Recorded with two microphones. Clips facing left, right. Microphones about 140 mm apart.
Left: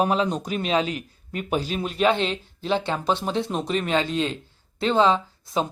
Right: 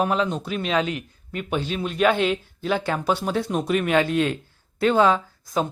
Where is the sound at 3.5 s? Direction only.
5° right (ahead or behind).